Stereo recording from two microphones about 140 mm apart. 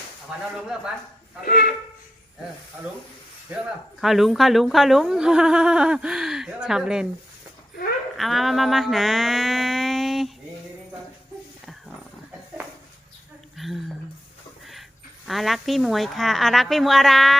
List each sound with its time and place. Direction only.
1.5 s speech: 90° left
4.0 s speech: centre (ahead or behind)
8.1 s mantra: centre (ahead or behind)
13.6 s speech: centre (ahead or behind)
15.3 s speech: centre (ahead or behind)